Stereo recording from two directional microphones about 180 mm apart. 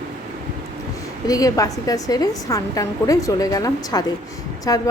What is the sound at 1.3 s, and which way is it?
A woman's voice, 20° left (ahead or behind).